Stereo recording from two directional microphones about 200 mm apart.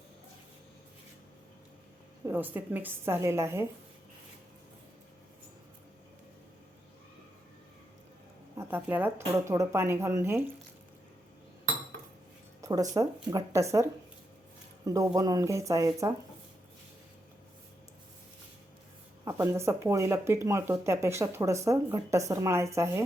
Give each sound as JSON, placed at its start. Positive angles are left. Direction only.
{"t": 2.2, "sound": "speech", "side_deg": -10}
{"t": 8.5, "sound": "speech", "side_deg": -10}
{"t": 12.6, "sound": "speech", "side_deg": -15}
{"t": 14.8, "sound": "speech", "side_deg": -15}
{"t": 19.2, "sound": "speech", "side_deg": -15}